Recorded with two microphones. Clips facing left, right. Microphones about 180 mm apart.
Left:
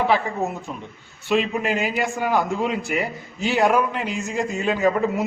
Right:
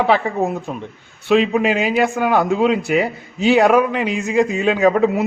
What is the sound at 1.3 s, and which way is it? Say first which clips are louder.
A man's voice: right 6 dB; 85° right.